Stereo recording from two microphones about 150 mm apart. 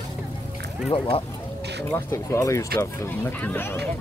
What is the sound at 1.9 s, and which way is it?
Speech, 15° left (ahead or behind).